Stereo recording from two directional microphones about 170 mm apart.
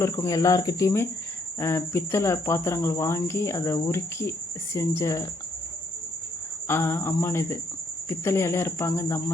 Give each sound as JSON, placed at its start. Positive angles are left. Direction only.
{"t": 0.0, "sound": "speech", "side_deg": 20}
{"t": 6.7, "sound": "speech", "side_deg": 15}